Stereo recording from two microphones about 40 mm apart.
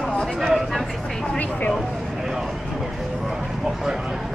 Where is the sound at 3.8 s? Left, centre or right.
Centre.